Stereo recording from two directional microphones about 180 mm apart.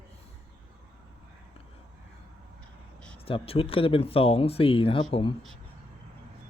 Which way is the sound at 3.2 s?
30° left (ahead or behind).